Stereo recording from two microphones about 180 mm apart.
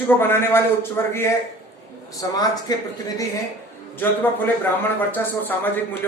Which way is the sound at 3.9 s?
10° left (ahead or behind).